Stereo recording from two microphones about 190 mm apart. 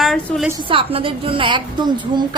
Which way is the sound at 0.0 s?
Centre (ahead or behind).